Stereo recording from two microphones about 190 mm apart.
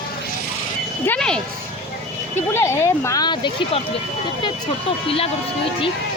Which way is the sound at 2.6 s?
15° left (ahead or behind).